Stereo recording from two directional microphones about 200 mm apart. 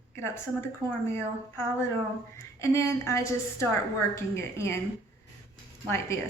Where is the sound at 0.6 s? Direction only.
15° left (ahead or behind).